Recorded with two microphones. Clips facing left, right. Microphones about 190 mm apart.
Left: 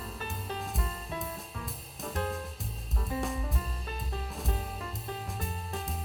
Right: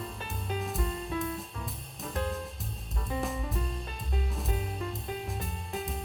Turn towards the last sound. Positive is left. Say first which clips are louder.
# right 2 dB
turn(degrees=0)  # may be behind; listen again after turning